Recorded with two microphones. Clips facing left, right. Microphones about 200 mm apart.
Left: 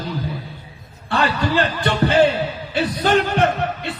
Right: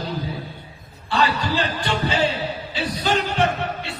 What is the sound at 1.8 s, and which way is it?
Music, 55° left (ahead or behind).